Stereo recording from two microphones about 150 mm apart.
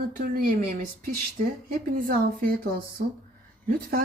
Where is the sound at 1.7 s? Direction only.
80° right.